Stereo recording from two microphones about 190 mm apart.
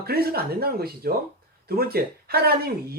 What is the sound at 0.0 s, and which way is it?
Speech, 55° right (ahead or behind).